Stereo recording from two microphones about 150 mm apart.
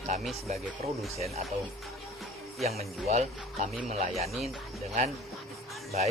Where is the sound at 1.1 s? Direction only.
45° right (ahead or behind).